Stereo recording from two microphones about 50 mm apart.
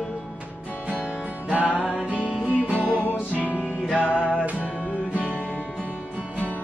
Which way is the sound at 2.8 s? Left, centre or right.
Left.